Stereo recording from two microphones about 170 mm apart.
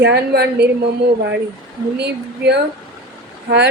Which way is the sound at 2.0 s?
80° right.